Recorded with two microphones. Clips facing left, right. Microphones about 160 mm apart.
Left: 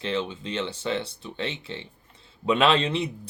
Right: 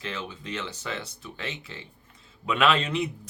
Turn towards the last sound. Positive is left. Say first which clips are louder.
# left 2 dB
turn(degrees=30)  # may be behind; listen again after turning